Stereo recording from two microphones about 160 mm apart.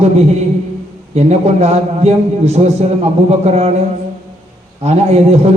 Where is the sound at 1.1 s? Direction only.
45° right (ahead or behind).